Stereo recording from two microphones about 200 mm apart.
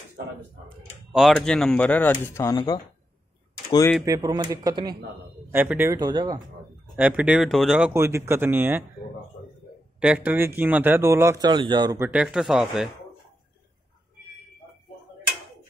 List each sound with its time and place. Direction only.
1.1 s speech: centre (ahead or behind); by 2.8 s 20° left (ahead or behind)
4.0 s speech: 20° right (ahead or behind)
7.0 s speech: 5° right (ahead or behind)
7.9 s speech: 15° right (ahead or behind)
9.9 s speech: 5° right (ahead or behind)
12.1 s speech: 5° right (ahead or behind)